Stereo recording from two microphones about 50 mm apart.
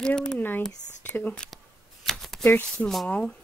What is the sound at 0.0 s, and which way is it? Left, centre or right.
Speech, centre.